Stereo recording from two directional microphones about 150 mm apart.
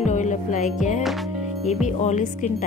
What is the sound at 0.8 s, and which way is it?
Speech, 55° left (ahead or behind).